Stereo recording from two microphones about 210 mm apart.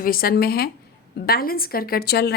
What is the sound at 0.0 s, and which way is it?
Speech, 45° left (ahead or behind).